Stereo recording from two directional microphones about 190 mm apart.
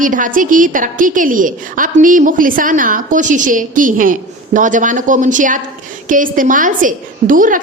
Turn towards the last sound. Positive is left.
turn(degrees=-45)  # may be behind; listen again after turning